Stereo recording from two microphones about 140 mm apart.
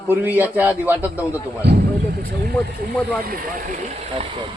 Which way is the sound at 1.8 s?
90° right.